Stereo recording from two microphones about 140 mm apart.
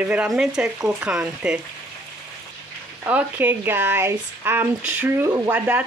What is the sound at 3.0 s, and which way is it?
Speech, 15° right (ahead or behind).